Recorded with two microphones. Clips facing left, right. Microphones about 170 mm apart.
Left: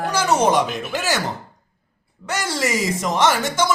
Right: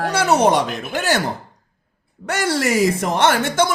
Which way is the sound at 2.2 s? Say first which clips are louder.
Right 4 dB; 60° right (ahead or behind).